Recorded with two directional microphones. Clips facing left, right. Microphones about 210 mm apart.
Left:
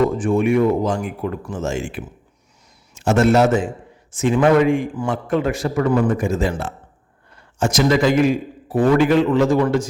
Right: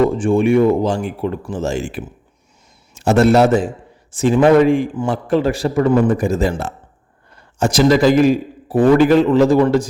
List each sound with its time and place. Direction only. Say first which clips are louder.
0.2 s a man's voice: right 3 dB; 30° right (ahead or behind)